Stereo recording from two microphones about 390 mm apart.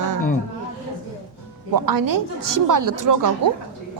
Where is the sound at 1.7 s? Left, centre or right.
Right.